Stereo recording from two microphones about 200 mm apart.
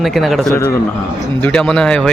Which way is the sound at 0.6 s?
10° left (ahead or behind).